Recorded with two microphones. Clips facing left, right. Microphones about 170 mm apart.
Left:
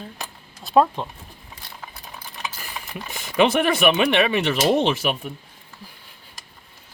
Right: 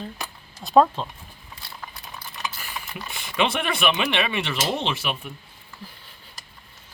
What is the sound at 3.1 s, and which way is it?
Speech, 40° left (ahead or behind).